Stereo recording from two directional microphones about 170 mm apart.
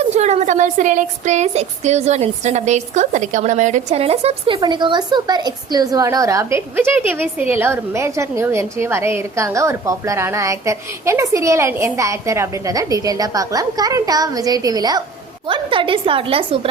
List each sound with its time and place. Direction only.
0.1 s a woman's voice: 40° right (ahead or behind)